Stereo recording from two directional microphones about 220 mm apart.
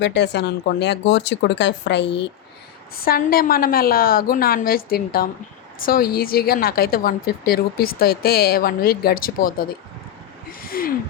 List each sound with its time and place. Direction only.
0.0 s a woman's voice: 50° left (ahead or behind)
3.0 s a woman's voice: 40° left (ahead or behind)
10.7 s gasp: 40° left (ahead or behind)